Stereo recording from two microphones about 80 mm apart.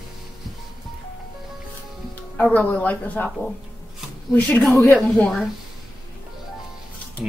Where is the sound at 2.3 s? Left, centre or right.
Centre.